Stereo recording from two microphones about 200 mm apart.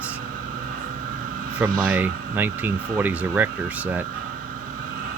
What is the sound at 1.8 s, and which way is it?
Speech, 10° right (ahead or behind).